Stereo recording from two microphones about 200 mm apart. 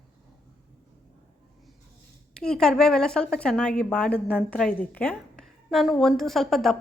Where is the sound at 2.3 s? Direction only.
5° left (ahead or behind).